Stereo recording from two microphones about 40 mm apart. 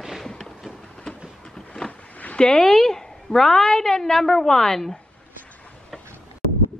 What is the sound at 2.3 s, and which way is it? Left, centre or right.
A woman's voice, centre.